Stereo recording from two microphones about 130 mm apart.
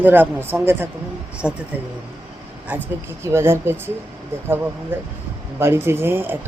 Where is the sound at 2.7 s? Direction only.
15° right (ahead or behind).